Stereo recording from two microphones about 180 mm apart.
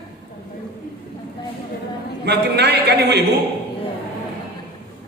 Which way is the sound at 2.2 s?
65° right (ahead or behind).